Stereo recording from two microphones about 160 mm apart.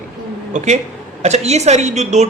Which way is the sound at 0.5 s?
50° right (ahead or behind).